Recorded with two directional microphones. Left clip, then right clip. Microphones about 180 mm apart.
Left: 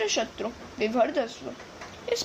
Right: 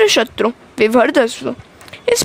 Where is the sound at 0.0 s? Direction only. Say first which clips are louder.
Right 15 dB; 60° right (ahead or behind).